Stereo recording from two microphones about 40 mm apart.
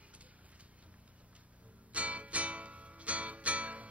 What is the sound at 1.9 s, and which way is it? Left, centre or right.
Music, right.